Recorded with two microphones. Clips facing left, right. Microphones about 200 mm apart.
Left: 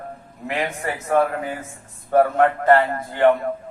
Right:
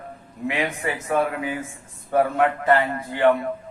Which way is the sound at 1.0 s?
45° left (ahead or behind).